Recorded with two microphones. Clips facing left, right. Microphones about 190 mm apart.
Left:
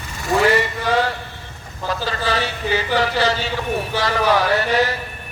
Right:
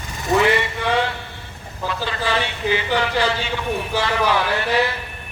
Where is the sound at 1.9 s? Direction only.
40° left (ahead or behind).